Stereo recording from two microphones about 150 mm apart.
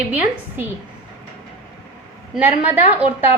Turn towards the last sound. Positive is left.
turn(degrees=-10)  # may be behind; listen again after turning